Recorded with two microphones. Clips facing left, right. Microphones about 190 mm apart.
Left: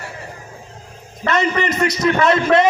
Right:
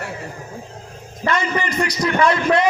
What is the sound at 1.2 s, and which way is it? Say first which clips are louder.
A man's voice: left 3 dB; 20° left (ahead or behind).